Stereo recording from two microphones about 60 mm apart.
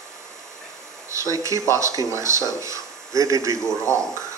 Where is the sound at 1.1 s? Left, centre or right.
Right.